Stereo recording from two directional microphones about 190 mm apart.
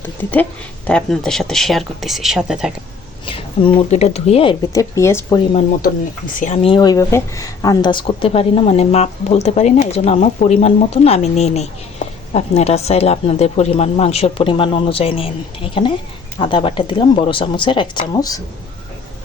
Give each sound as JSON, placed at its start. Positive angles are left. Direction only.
{"t": 0.2, "sound": "speech", "side_deg": 10}
{"t": 3.2, "sound": "speech", "side_deg": 30}
{"t": 4.7, "sound": "speech", "side_deg": 15}
{"t": 6.4, "sound": "speech", "side_deg": 35}